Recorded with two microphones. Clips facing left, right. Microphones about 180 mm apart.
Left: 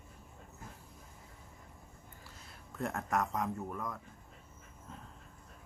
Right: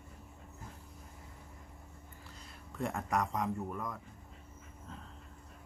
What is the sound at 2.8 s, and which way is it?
Speech, centre (ahead or behind).